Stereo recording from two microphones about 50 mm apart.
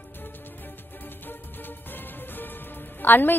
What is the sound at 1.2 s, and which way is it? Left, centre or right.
Music, left.